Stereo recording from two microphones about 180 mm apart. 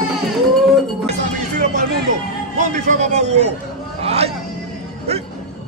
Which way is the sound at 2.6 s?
45° right (ahead or behind).